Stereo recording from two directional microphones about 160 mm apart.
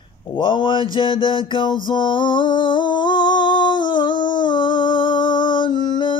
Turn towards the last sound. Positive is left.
turn(degrees=30)  # may be behind; listen again after turning